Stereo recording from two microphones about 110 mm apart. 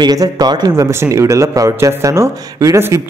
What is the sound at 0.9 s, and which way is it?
Speech, 25° right (ahead or behind).